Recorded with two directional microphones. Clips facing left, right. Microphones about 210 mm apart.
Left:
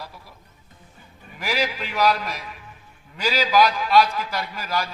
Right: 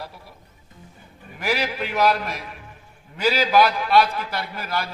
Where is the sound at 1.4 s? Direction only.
60° right (ahead or behind).